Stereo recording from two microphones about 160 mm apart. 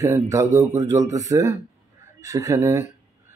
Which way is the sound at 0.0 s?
15° right (ahead or behind).